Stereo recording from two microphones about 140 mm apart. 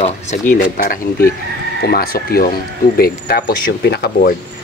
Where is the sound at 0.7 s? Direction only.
90° left.